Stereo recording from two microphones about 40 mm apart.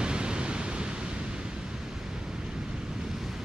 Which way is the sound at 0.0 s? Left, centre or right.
Right.